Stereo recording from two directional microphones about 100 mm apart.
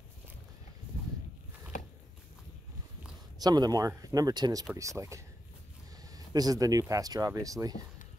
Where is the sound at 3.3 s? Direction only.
40° right (ahead or behind).